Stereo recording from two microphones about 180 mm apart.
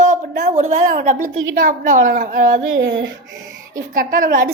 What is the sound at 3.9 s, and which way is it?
Speech, 50° right (ahead or behind).